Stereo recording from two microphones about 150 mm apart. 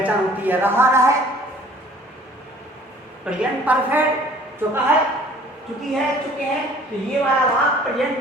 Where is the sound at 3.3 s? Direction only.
10° right (ahead or behind).